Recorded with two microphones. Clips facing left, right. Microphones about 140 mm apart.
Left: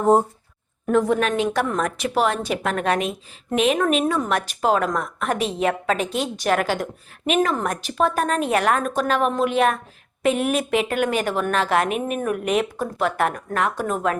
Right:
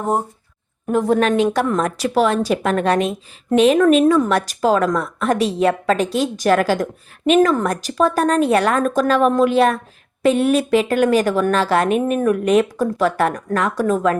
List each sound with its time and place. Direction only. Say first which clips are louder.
1.0 s a woman's voice: right 5 dB; 35° right (ahead or behind)
3.8 s a woman's voice: right 8 dB; 45° right (ahead or behind)